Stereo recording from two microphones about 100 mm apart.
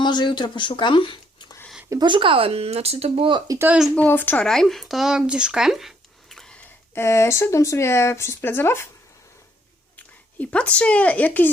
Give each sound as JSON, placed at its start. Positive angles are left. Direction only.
{"t": 0.0, "sound": "speech", "side_deg": 50}
{"t": 2.0, "sound": "speech", "side_deg": -55}
{"t": 3.9, "sound": "speech", "side_deg": 20}
{"t": 4.4, "sound": "speech", "side_deg": 5}
{"t": 6.9, "sound": "speech", "side_deg": 25}
{"t": 10.3, "sound": "speech", "side_deg": 15}